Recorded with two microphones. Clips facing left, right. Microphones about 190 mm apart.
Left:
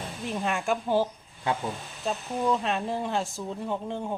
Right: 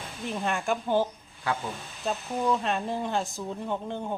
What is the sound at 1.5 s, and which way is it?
Speech, 20° left (ahead or behind).